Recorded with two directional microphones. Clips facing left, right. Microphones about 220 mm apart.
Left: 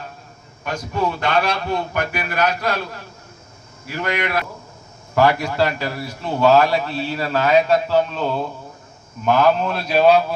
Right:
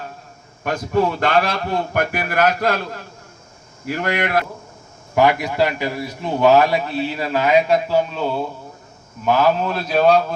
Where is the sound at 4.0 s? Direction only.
50° right (ahead or behind).